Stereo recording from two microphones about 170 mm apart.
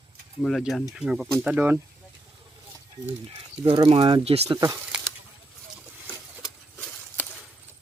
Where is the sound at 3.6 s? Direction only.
30° right (ahead or behind).